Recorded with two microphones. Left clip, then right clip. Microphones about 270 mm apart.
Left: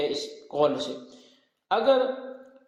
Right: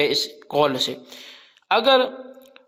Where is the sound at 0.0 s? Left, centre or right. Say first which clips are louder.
Right 8 dB; right.